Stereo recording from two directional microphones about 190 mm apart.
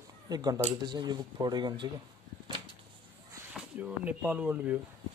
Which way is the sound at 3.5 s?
5° right (ahead or behind).